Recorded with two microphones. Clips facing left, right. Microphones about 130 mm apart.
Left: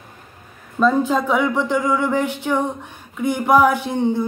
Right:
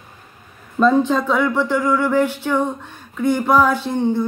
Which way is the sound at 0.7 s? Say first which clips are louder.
Right 2 dB; 5° left (ahead or behind).